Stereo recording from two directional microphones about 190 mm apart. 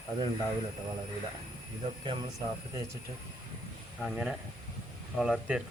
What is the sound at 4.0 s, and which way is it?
Speech, centre (ahead or behind).